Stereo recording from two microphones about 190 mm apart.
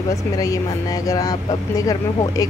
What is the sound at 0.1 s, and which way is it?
A woman's voice, 20° left (ahead or behind).